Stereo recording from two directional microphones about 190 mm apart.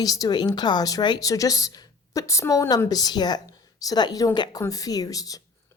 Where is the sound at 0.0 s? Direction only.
20° left (ahead or behind).